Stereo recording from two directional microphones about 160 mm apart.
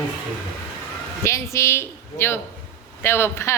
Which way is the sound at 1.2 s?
20° left (ahead or behind).